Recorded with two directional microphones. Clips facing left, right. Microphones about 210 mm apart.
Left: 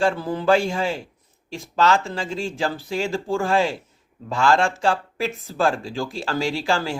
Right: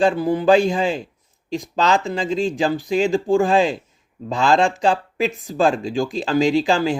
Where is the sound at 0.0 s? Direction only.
15° right (ahead or behind).